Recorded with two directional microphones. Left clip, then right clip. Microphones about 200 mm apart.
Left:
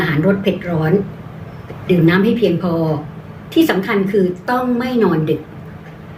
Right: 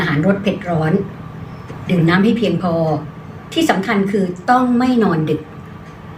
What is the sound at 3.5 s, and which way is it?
A woman's voice, 5° left (ahead or behind).